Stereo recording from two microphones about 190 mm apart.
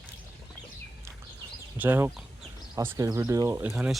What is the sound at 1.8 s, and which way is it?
Speech, 10° right (ahead or behind).